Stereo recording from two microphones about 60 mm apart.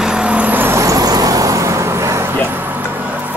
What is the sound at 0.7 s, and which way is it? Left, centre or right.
Vehicle, right.